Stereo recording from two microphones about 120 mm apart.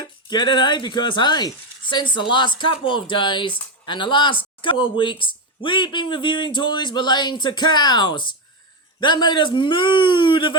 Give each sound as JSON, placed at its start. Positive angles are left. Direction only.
{"t": 0.0, "sound": "a man's voice", "side_deg": 35}